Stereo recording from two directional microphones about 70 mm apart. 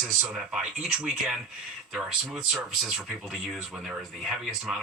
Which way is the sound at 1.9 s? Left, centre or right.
Centre.